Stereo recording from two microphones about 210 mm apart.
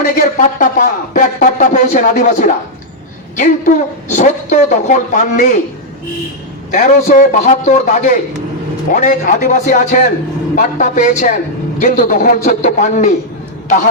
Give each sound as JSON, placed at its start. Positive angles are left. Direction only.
{"t": 0.0, "sound": "speech", "side_deg": 40}
{"t": 6.7, "sound": "speech", "side_deg": 40}